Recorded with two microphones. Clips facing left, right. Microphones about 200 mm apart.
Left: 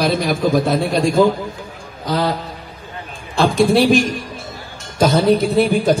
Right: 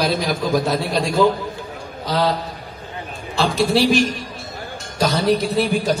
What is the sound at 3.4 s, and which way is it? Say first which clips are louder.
A man's voice: left 4 dB; 50° left (ahead or behind).